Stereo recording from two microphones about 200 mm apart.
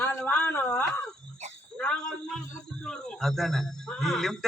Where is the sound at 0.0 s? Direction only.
10° left (ahead or behind).